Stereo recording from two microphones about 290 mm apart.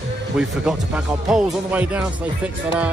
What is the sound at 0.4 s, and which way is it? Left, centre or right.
Speech, centre.